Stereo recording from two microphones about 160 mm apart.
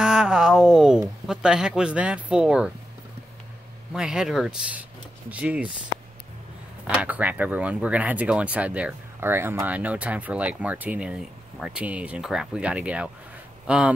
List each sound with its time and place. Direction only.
0.0 s speech: 5° right (ahead or behind)
3.9 s speech: 5° right (ahead or behind)
6.9 s speech: 10° right (ahead or behind)